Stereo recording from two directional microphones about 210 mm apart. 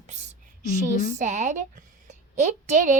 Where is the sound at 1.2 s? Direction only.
35° right (ahead or behind).